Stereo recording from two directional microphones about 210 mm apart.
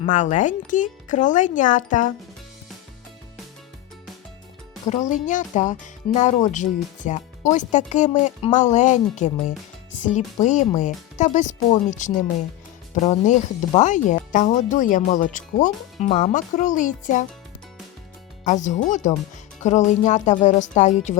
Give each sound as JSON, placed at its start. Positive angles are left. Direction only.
{"t": 0.0, "sound": "speech", "side_deg": 35}
{"t": 4.9, "sound": "speech", "side_deg": 35}
{"t": 18.4, "sound": "speech", "side_deg": 35}